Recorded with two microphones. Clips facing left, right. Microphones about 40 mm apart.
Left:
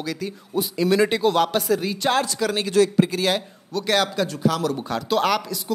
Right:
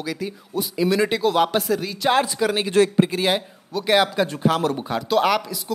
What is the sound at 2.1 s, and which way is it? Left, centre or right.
Speech, centre.